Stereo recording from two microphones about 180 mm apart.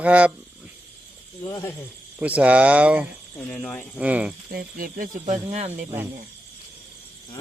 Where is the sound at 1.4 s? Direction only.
15° left (ahead or behind).